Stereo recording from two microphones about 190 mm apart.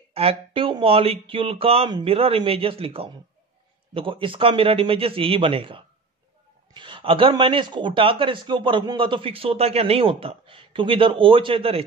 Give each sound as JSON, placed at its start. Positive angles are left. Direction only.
{"t": 0.1, "sound": "a man's voice", "side_deg": -30}